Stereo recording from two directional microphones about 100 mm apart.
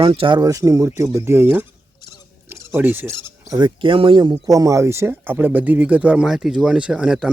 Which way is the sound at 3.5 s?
50° right (ahead or behind).